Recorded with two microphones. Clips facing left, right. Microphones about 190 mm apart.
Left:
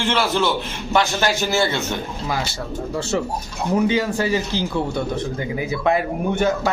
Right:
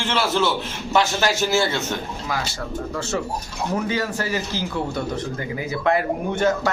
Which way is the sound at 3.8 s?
20° left (ahead or behind).